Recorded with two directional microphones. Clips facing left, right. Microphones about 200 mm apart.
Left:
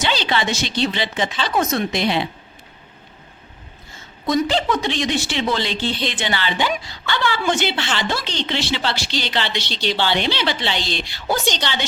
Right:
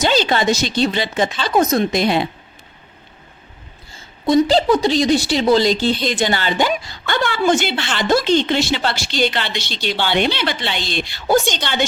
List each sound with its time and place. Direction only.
0.0 s a woman's voice: 45° right (ahead or behind)
3.9 s a woman's voice: 30° right (ahead or behind); by 11.9 s 50° right (ahead or behind)